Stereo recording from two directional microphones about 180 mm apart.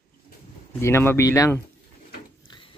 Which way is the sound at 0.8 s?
15° left (ahead or behind).